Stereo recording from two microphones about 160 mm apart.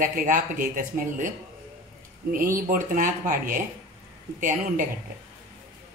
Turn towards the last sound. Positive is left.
turn(degrees=-55)  # may be behind; listen again after turning